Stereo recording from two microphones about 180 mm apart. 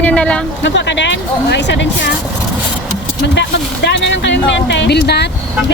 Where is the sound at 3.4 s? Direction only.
70° left (ahead or behind).